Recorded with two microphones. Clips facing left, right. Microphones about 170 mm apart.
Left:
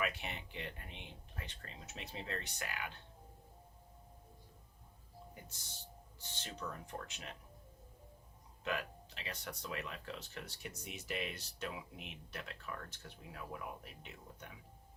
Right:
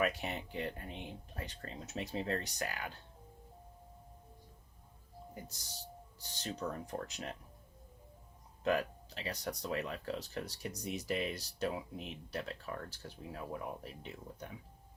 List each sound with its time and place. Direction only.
0.0 s speech: 40° right (ahead or behind)
6.1 s speech: 40° right (ahead or behind)
8.6 s speech: 40° right (ahead or behind)